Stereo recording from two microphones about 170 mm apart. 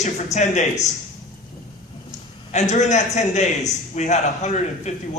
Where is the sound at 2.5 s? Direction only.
45° left (ahead or behind).